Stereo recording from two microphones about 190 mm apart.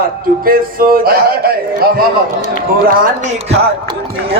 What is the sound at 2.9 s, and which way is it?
Music, 50° right (ahead or behind).